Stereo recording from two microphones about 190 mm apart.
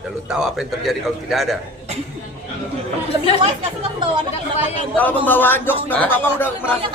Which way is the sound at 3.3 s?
25° right (ahead or behind).